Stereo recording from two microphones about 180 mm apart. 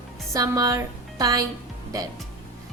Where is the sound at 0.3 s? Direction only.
20° right (ahead or behind).